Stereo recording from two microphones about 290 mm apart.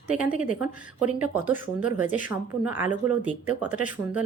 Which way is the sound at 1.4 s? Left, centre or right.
Centre.